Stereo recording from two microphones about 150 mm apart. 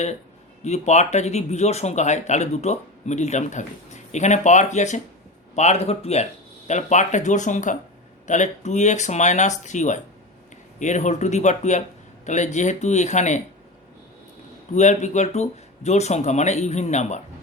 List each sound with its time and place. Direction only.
0.6 s speech: 50° left (ahead or behind)
14.8 s speech: 50° left (ahead or behind)